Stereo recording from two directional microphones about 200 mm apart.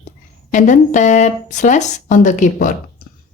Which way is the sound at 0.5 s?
40° left (ahead or behind).